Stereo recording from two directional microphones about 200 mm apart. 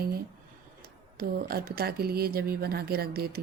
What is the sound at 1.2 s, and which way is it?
Speech, 50° right (ahead or behind).